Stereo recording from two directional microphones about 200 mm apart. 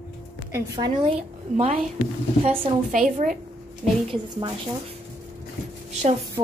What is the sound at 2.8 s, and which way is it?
Speech, 40° right (ahead or behind).